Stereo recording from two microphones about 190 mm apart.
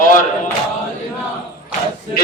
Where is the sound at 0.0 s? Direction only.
45° left (ahead or behind).